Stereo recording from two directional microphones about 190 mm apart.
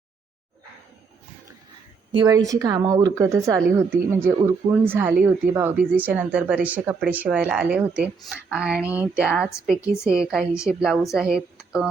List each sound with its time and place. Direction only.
2.1 s a woman's voice: 20° right (ahead or behind); by 11.9 s 5° right (ahead or behind)